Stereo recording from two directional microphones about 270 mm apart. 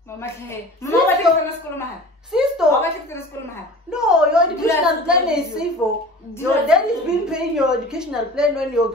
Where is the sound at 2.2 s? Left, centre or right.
Centre.